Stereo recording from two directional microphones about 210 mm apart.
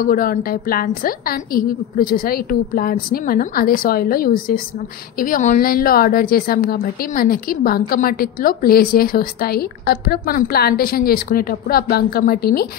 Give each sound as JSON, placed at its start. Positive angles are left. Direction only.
{"t": 0.0, "sound": "a woman's voice", "side_deg": 40}